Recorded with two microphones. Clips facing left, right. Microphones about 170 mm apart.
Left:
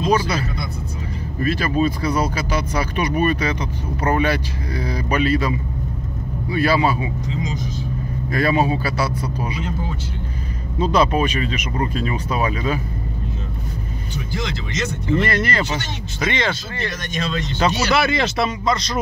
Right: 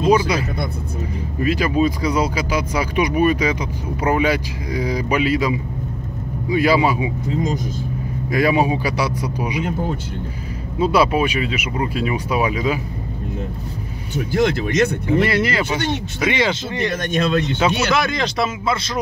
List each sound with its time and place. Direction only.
0.0 s speech: 10° right (ahead or behind)
7.2 s speech: 55° right (ahead or behind)
8.3 s speech: 10° right (ahead or behind)
9.7 s speech: 55° right (ahead or behind)
10.8 s speech: 10° right (ahead or behind)
14.1 s speech: 55° right (ahead or behind)
15.0 s speech: 10° right (ahead or behind)
16.9 s speech: 55° right (ahead or behind)
17.9 s speech: 5° left (ahead or behind)